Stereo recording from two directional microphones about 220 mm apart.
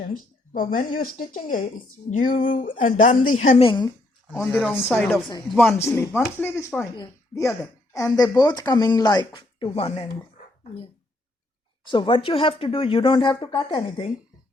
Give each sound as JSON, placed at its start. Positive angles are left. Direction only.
{"t": 0.1, "sound": "speech", "side_deg": 40}
{"t": 4.3, "sound": "speech", "side_deg": 10}
{"t": 5.7, "sound": "speech", "side_deg": 10}
{"t": 11.9, "sound": "speech", "side_deg": 20}